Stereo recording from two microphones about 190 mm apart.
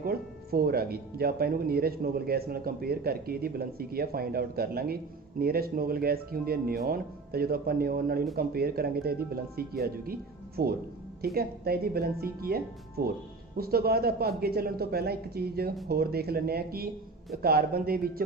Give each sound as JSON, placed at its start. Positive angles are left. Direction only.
{"t": 0.0, "sound": "speech", "side_deg": -50}